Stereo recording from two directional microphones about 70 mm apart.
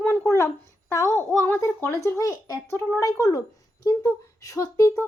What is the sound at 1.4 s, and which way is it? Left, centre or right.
Speech, left.